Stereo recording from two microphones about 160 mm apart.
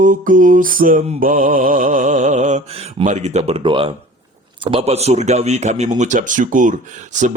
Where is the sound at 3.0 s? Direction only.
45° right (ahead or behind).